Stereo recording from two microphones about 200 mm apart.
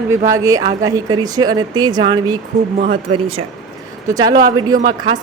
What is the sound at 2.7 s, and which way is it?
Speech, 45° right (ahead or behind).